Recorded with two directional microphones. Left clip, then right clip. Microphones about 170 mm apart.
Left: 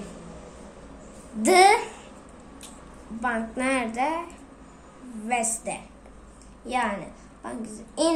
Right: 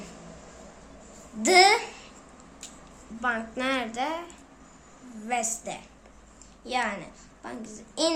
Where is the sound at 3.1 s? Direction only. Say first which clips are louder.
Left 1 dB; 15° right (ahead or behind).